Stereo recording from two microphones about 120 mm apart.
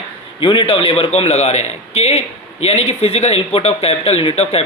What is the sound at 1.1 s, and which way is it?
Speech, 65° left (ahead or behind).